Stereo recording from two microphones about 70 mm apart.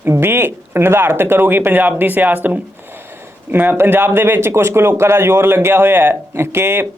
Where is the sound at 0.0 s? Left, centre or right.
Right.